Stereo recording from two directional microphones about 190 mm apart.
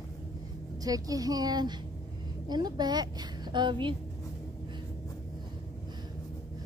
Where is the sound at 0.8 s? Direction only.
20° right (ahead or behind).